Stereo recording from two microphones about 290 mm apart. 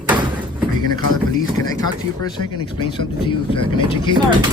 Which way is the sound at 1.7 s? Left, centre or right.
Centre.